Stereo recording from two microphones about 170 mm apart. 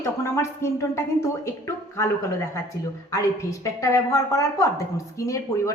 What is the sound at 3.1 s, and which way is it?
A woman's voice, 20° left (ahead or behind).